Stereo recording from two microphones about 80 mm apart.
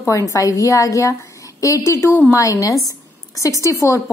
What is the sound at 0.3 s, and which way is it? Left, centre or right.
A woman's voice, left.